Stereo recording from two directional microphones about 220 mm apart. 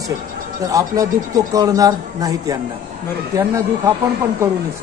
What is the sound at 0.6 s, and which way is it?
Speech, 15° right (ahead or behind).